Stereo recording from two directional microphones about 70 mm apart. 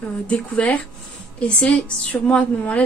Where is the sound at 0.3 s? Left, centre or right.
Centre.